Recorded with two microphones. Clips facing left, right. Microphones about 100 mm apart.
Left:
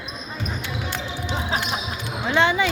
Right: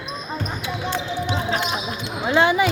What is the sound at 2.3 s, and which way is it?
Basketball bounce, 15° right (ahead or behind).